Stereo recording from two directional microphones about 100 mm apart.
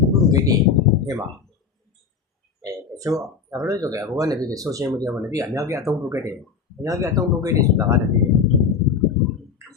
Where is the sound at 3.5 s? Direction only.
35° right (ahead or behind).